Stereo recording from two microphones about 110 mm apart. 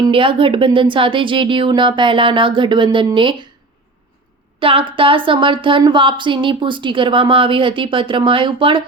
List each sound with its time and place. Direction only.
0.1 s speech: 50° right (ahead or behind)
4.6 s speech: 55° right (ahead or behind)